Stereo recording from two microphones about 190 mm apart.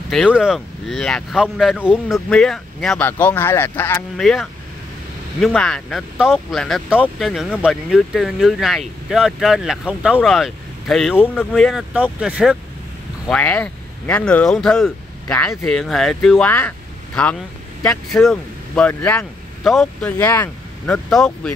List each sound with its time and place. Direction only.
0.1 s speech: centre (ahead or behind)
13.3 s speech: 5° left (ahead or behind)